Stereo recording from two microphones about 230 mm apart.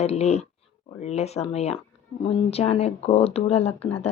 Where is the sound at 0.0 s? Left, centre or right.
Left.